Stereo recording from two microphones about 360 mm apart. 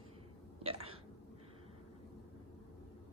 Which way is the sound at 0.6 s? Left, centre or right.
Centre.